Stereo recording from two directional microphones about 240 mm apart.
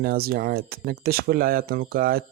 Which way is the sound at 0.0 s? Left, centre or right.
Right.